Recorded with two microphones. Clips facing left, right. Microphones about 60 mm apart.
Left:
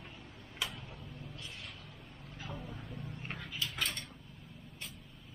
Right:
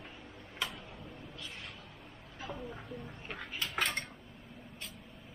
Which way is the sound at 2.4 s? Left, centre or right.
Centre.